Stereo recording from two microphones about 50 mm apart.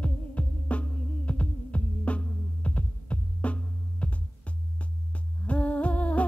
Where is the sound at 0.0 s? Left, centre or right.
Left.